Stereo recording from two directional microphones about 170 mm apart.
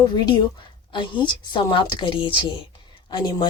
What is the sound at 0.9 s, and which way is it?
Speech, 25° left (ahead or behind).